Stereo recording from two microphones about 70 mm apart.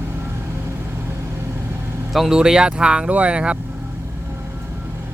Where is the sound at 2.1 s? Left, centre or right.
Centre.